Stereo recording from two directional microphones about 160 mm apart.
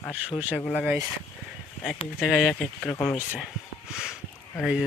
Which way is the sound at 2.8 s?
10° left (ahead or behind).